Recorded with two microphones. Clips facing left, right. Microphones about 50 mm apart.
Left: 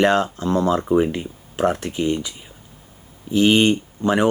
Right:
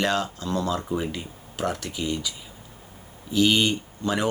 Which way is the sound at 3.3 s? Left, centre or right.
Left.